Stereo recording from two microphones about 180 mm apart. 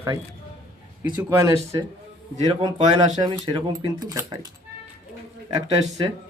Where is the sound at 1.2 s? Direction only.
15° right (ahead or behind).